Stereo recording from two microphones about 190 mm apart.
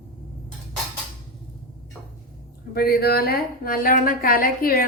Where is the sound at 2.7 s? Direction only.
55° left (ahead or behind).